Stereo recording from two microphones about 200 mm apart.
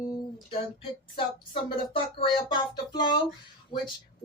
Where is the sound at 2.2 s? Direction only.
25° left (ahead or behind).